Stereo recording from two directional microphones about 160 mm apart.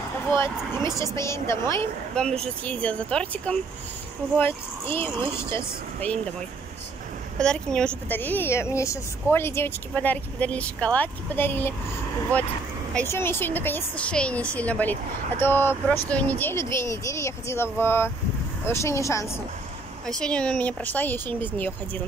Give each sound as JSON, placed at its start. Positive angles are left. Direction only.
{"t": 0.3, "sound": "a woman's voice", "side_deg": 15}
{"t": 5.4, "sound": "a woman's voice", "side_deg": 15}
{"t": 7.3, "sound": "a woman's voice", "side_deg": 5}
{"t": 20.1, "sound": "a woman's voice", "side_deg": 5}